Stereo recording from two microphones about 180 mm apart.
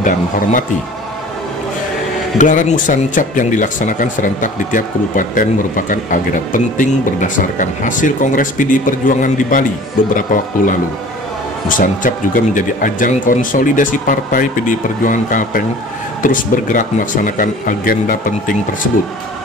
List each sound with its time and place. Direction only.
0.0 s speech: 45° left (ahead or behind)
2.3 s speech: 45° left (ahead or behind)
12.5 s speech: 45° left (ahead or behind)